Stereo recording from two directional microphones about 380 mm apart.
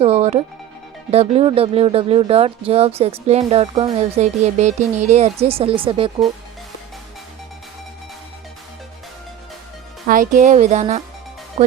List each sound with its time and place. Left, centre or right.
0.0 s speech: centre
10.1 s speech: right